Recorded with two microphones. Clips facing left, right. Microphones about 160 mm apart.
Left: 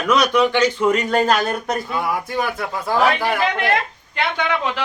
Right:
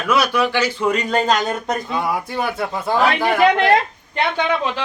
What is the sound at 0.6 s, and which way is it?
Speech, 10° left (ahead or behind).